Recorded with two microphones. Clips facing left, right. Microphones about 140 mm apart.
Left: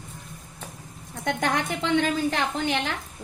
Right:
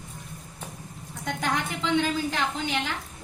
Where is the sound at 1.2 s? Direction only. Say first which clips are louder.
Left 3 dB; 60° left (ahead or behind).